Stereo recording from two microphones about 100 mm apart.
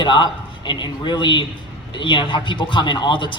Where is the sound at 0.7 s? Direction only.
50° left (ahead or behind).